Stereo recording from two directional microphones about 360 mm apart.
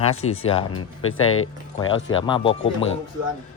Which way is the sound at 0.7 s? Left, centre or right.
Left.